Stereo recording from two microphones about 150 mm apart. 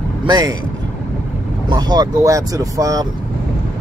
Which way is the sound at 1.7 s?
30° right (ahead or behind).